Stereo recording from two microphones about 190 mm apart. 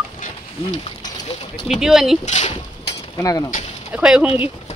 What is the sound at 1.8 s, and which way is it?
Speech, centre (ahead or behind).